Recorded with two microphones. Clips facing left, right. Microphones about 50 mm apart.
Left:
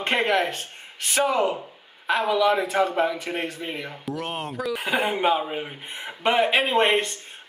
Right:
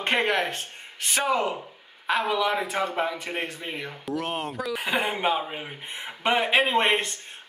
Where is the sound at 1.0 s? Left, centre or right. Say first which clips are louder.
Left 3 dB; centre.